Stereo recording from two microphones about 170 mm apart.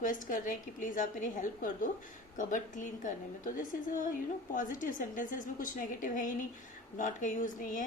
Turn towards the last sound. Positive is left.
turn(degrees=50)  # may be behind; listen again after turning